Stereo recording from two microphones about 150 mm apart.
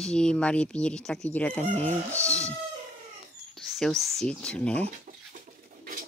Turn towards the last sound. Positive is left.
turn(degrees=-70)  # may be behind; listen again after turning